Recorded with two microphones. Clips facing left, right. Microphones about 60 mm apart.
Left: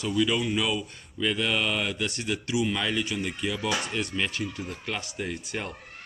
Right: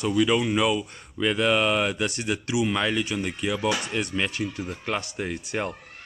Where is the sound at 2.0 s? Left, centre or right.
Centre.